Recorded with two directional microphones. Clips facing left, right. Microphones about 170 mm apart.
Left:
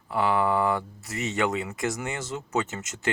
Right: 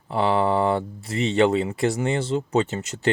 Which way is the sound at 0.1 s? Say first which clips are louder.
Right 3 dB; 25° right (ahead or behind).